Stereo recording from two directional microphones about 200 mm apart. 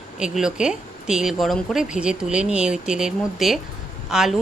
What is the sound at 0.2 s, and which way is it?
Speech, 5° right (ahead or behind).